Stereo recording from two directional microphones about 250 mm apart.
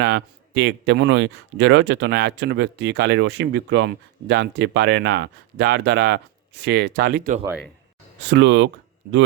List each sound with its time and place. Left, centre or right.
0.0 s speech: right
7.4 s speech: centre
8.3 s speech: right